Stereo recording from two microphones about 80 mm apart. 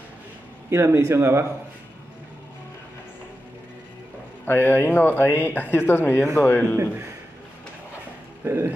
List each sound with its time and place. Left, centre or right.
0.7 s a man's voice: right
4.5 s speech: left
8.5 s a man's voice: right